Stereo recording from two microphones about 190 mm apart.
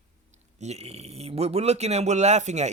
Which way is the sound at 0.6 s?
35° right (ahead or behind).